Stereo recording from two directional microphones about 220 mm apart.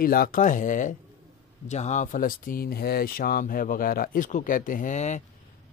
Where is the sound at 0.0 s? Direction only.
40° left (ahead or behind).